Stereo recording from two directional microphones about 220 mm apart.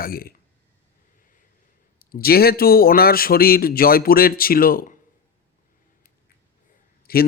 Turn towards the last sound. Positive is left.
turn(degrees=45)  # may be behind; listen again after turning